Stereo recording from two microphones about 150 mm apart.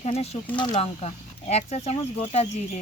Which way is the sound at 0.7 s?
45° left (ahead or behind).